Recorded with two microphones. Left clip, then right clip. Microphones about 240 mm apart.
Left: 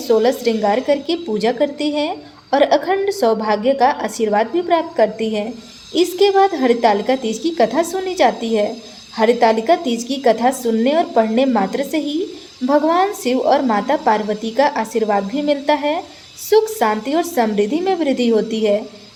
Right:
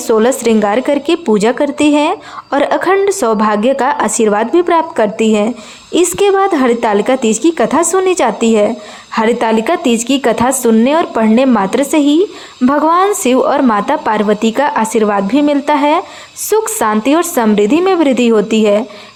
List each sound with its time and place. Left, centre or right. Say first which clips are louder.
0.1 s speech: right 5 dB; right